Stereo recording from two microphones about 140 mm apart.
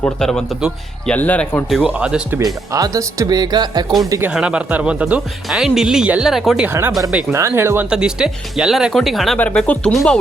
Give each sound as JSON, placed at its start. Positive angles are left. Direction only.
{"t": 0.0, "sound": "speech", "side_deg": 5}
{"t": 1.7, "sound": "speech", "side_deg": -5}
{"t": 2.4, "sound": "speech", "side_deg": -25}
{"t": 4.3, "sound": "speech", "side_deg": -5}
{"t": 6.7, "sound": "speech", "side_deg": -15}
{"t": 7.3, "sound": "speech", "side_deg": -20}
{"t": 7.9, "sound": "speech", "side_deg": -5}